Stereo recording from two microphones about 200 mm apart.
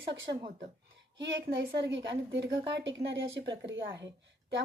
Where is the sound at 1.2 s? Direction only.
60° right (ahead or behind).